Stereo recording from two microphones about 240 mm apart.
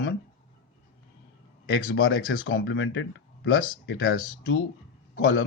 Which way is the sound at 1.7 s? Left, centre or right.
Left.